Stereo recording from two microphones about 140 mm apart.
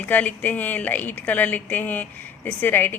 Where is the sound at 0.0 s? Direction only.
10° left (ahead or behind).